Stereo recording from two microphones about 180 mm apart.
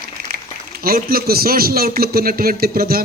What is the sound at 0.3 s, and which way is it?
A man's voice, 55° right (ahead or behind).